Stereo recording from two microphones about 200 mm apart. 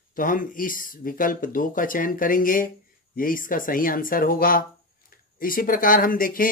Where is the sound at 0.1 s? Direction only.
45° left (ahead or behind).